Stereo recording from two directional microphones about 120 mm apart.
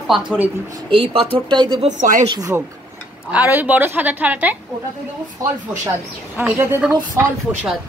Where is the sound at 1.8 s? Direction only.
90° right.